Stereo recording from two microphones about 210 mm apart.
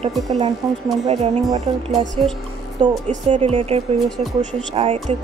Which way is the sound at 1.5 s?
30° right (ahead or behind).